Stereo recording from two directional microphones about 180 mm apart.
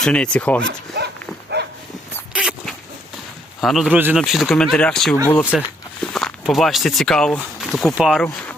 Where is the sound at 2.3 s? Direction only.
5° right (ahead or behind).